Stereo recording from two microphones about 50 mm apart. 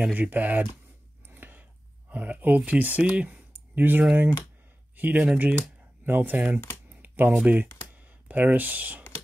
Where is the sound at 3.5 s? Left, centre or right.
Right.